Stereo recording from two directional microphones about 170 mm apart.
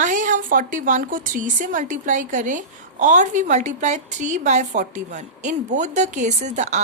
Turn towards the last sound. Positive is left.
turn(degrees=-45)  # may be behind; listen again after turning